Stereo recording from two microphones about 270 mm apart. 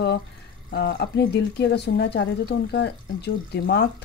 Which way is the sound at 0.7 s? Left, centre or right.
Left.